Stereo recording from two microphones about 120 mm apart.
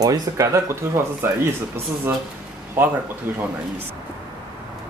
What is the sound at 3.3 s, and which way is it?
Speech, 20° right (ahead or behind).